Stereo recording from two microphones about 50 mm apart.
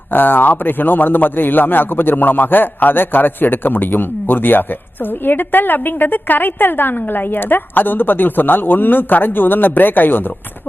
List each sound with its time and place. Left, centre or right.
0.1 s a man's voice: left